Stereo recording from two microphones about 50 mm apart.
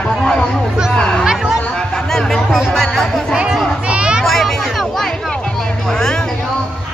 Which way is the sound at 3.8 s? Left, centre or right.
Right.